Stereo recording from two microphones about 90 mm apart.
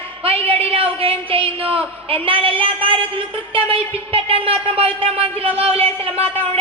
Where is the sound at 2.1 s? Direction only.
85° right.